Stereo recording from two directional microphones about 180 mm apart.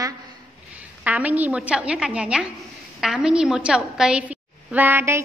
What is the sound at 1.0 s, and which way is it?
A woman's voice, 10° right (ahead or behind).